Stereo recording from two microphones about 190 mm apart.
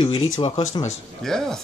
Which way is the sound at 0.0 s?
30° left (ahead or behind).